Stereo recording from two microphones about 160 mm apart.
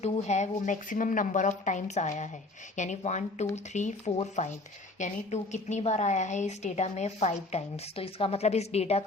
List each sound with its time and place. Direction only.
0.0 s a woman's voice: 45° left (ahead or behind)